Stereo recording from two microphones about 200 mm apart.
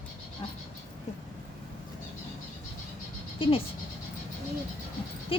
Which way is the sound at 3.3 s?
25° left (ahead or behind).